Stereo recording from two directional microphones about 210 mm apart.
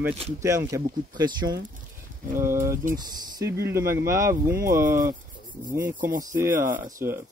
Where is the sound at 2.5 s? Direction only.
40° right (ahead or behind).